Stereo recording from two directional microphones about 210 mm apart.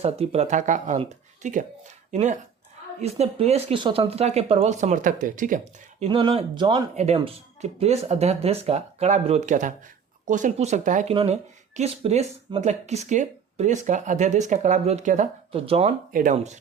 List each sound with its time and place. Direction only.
0.0 s speech: 30° right (ahead or behind)
6.1 s speech: 25° right (ahead or behind)
16.1 s speech: 35° right (ahead or behind)